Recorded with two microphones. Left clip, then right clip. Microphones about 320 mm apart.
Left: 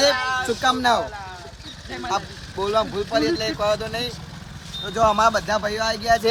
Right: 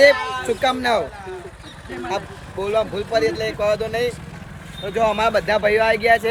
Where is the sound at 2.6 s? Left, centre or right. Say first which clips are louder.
Right 1 dB; centre.